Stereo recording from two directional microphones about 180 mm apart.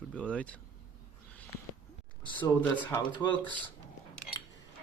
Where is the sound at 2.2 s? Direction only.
10° left (ahead or behind).